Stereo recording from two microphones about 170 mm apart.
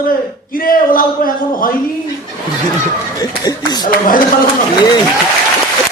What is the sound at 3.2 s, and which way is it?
Speech, 25° left (ahead or behind).